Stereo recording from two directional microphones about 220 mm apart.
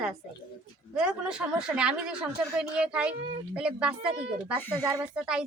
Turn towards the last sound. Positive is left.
turn(degrees=-5)  # may be behind; listen again after turning